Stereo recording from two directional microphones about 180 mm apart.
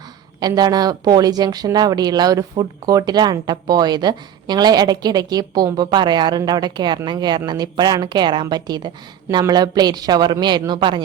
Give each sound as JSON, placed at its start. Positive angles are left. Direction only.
{"t": 0.3, "sound": "speech", "side_deg": -20}